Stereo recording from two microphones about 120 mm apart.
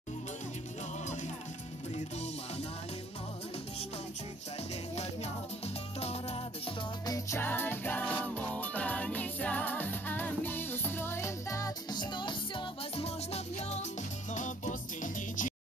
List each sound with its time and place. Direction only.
5.9 s music: 60° left (ahead or behind)
7.1 s music: 20° left (ahead or behind); by 13.8 s 65° left (ahead or behind)
14.3 s music: 90° left